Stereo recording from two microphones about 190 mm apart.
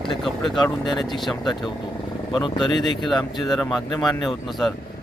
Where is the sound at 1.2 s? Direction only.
Centre (ahead or behind).